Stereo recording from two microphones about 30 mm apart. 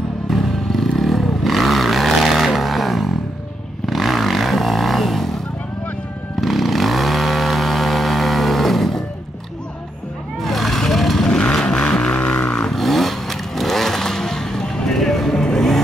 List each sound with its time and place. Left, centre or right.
0.3 s vehicle: centre
6.4 s vehicle: centre
10.4 s vehicle: centre
11.2 s vehicle: left
12.1 s a sound: left
12.7 s vehicle: centre